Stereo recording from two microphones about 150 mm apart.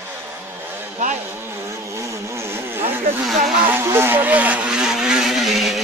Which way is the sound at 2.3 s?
15° right (ahead or behind).